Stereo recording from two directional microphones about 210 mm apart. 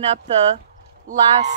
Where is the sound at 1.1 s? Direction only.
35° right (ahead or behind).